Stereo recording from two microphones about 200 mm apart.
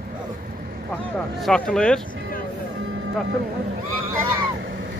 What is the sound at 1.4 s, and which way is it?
Speech, 5° left (ahead or behind).